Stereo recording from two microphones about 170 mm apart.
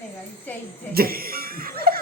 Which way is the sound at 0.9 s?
60° right (ahead or behind).